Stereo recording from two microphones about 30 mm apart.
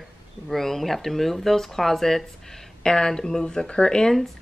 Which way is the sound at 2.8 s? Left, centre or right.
Left.